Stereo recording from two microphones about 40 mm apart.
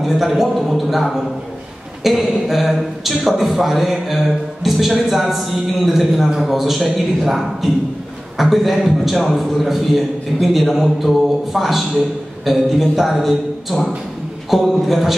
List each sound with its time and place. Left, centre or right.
0.0 s a man's voice: centre